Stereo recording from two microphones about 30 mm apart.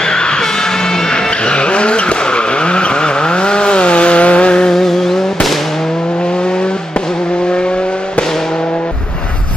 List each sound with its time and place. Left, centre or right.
1.1 s vehicle: left
4.6 s vehicle: centre